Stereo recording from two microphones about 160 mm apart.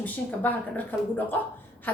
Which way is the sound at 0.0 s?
10° left (ahead or behind).